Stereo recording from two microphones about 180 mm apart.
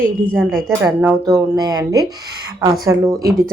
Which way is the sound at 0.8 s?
15° right (ahead or behind).